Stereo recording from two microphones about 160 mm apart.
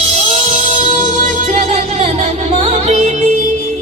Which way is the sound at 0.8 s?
55° right (ahead or behind).